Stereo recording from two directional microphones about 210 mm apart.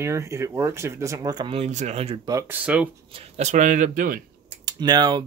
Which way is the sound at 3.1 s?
30° right (ahead or behind).